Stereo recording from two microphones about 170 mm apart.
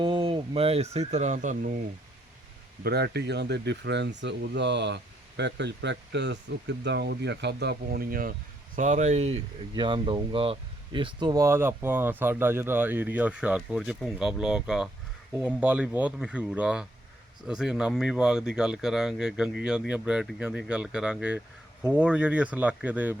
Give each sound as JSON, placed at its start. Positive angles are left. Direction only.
{"t": 0.0, "sound": "speech", "side_deg": -30}
{"t": 2.8, "sound": "speech", "side_deg": -70}